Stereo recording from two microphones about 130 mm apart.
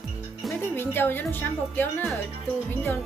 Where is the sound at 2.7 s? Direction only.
15° left (ahead or behind).